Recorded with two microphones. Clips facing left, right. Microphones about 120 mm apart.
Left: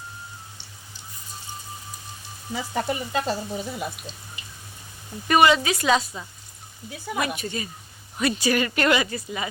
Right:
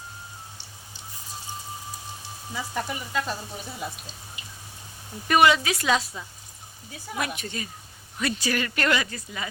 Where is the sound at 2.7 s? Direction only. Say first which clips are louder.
Left 4 dB; 90° left.